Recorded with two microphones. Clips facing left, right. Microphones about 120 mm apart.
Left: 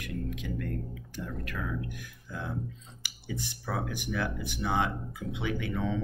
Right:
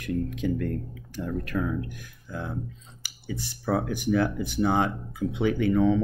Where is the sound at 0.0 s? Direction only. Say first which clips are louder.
Right 9 dB; 35° right (ahead or behind).